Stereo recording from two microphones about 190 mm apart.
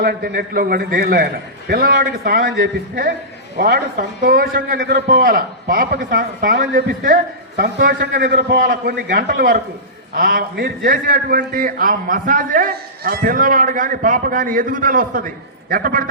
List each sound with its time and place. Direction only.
0.0 s a man's voice: 55° right (ahead or behind)